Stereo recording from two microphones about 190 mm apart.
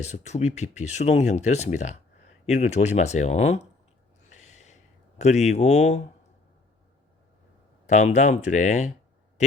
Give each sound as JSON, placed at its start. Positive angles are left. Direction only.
{"t": 0.3, "sound": "speech", "side_deg": 35}
{"t": 4.3, "sound": "a sound", "side_deg": 40}
{"t": 7.9, "sound": "speech", "side_deg": 40}